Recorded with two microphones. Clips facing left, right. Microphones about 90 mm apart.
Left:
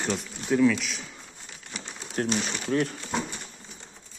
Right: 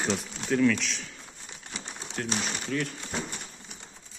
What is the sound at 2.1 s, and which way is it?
Speech, 45° left (ahead or behind).